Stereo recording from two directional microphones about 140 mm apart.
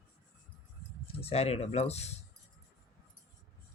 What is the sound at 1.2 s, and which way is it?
Speech, 45° left (ahead or behind).